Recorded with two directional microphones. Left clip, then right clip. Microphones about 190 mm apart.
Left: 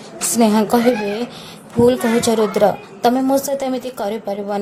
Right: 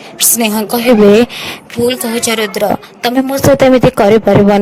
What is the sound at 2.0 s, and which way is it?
Speech, 5° right (ahead or behind).